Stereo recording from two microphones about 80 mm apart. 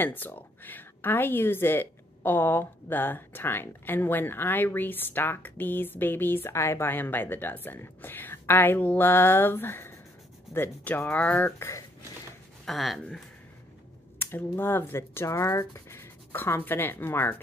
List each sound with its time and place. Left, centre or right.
0.0 s a woman's voice: left
12.6 s speech: centre
14.1 s speech: left